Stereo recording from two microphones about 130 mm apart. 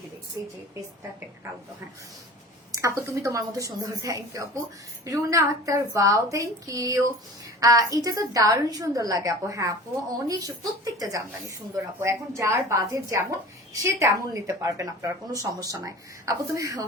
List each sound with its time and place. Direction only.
0.4 s a woman's voice: 20° right (ahead or behind)
2.8 s a woman's voice: 25° right (ahead or behind)